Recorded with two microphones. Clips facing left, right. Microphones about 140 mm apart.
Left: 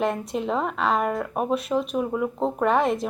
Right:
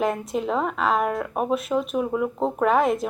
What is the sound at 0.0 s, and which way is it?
Speech, centre (ahead or behind).